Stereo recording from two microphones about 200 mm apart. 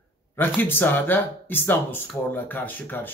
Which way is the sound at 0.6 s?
10° left (ahead or behind).